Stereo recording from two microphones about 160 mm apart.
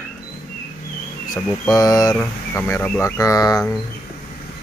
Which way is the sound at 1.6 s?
20° left (ahead or behind).